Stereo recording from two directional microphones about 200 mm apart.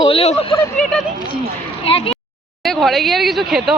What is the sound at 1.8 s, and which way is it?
Speech, 30° left (ahead or behind).